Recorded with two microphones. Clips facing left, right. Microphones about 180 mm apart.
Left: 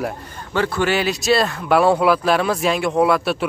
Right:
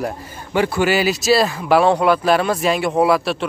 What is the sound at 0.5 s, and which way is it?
Speech, 10° right (ahead or behind).